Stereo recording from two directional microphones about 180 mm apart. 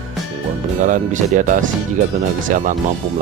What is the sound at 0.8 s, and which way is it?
Speech, 45° right (ahead or behind).